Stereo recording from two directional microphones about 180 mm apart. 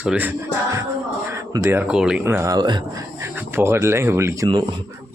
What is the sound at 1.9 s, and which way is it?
Speech, 5° right (ahead or behind).